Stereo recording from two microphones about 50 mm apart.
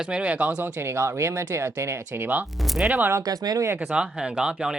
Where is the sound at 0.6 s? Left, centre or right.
Right.